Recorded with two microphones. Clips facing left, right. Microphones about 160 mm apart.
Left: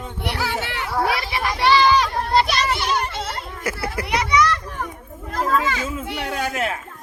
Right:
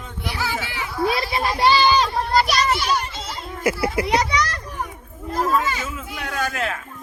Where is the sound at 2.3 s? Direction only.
25° left (ahead or behind).